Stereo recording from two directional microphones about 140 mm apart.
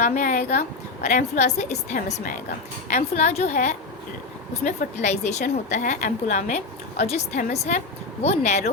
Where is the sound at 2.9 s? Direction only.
55° left (ahead or behind).